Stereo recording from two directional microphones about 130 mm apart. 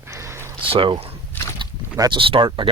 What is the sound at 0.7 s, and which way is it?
Speech, 45° right (ahead or behind).